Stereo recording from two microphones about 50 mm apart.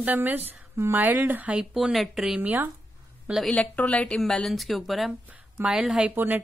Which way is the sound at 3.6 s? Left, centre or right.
Left.